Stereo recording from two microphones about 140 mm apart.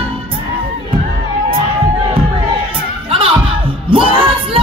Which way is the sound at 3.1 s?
40° right (ahead or behind).